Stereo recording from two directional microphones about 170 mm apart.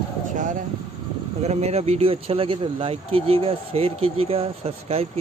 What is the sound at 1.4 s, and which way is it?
Speech, 40° right (ahead or behind).